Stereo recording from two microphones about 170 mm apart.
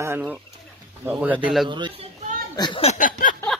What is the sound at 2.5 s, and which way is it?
Speech, 25° left (ahead or behind).